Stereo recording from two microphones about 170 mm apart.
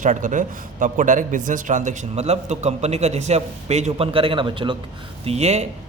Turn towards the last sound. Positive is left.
turn(degrees=-40)  # may be behind; listen again after turning